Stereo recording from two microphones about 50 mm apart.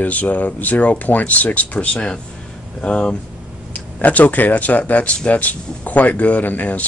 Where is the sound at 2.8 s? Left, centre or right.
Left.